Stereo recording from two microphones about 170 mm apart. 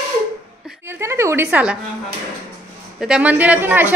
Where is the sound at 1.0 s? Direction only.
15° right (ahead or behind).